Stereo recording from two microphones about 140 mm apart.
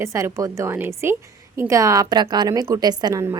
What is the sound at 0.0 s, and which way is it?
Speech, 20° right (ahead or behind).